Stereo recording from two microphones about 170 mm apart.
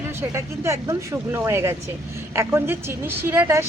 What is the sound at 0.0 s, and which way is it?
A woman's voice, 15° right (ahead or behind).